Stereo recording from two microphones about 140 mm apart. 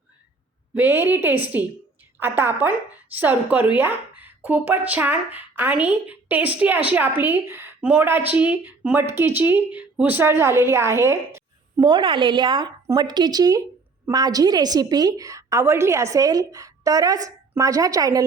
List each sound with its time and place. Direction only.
0.7 s a woman's voice: 15° right (ahead or behind)
11.9 s a woman's voice: 35° right (ahead or behind)